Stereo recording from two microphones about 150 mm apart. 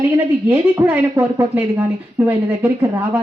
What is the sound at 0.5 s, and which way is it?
Speech, 15° right (ahead or behind).